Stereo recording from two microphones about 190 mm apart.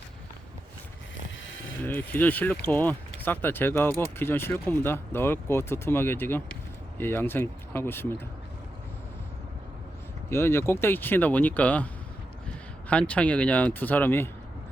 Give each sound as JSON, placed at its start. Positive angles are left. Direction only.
{"t": 1.8, "sound": "speech", "side_deg": 10}
{"t": 10.2, "sound": "speech", "side_deg": 10}
{"t": 12.9, "sound": "speech", "side_deg": 5}